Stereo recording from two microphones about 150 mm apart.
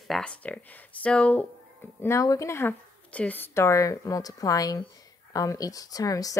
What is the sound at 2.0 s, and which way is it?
A woman's voice, 20° left (ahead or behind).